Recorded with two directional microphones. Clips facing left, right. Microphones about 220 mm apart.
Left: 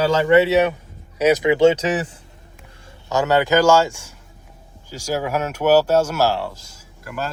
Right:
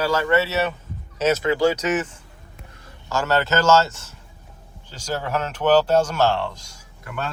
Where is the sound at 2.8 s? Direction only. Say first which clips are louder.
Left 4 dB; 20° left (ahead or behind); by 7.3 s 5° left (ahead or behind).